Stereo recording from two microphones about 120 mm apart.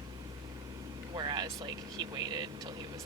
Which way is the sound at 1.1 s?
35° right (ahead or behind).